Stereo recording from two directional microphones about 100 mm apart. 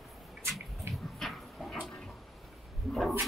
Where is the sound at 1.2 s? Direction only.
Centre (ahead or behind).